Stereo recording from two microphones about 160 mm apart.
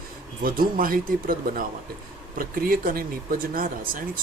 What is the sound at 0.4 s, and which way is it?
Speech, 60° right (ahead or behind).